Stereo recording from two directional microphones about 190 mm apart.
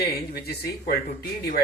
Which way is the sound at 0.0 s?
55° left (ahead or behind).